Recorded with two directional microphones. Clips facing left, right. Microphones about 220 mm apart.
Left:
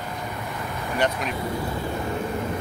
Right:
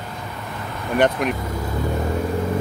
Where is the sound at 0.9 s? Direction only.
55° right (ahead or behind).